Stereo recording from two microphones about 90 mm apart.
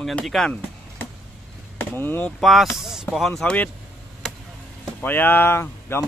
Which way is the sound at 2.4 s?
Centre (ahead or behind).